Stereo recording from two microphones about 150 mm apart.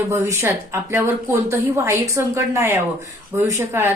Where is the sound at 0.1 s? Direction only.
15° right (ahead or behind).